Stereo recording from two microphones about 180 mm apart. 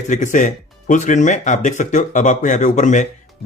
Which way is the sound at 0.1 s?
45° left (ahead or behind).